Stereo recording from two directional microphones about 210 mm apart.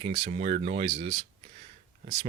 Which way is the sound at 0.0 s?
25° right (ahead or behind).